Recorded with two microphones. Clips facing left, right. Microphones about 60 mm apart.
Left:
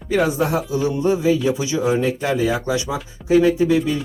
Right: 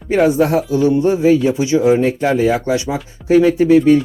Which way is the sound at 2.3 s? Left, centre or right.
Right.